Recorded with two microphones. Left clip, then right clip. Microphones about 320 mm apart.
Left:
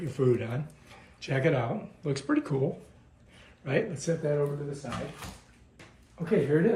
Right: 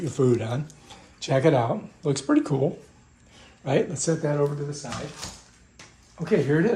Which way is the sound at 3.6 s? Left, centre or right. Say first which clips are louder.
Right 5 dB; centre.